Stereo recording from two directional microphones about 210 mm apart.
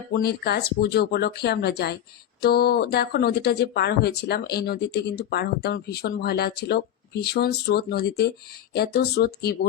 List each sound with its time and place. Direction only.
0.1 s speech: 50° left (ahead or behind)